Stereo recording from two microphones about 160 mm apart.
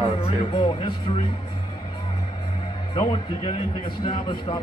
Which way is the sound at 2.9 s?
35° left (ahead or behind).